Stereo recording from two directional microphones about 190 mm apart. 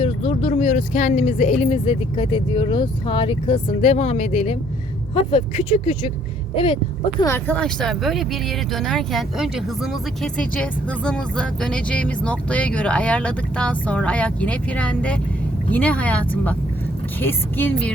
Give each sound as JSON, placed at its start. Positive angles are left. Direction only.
{"t": 0.0, "sound": "speech", "side_deg": 30}
{"t": 7.2, "sound": "speech", "side_deg": 15}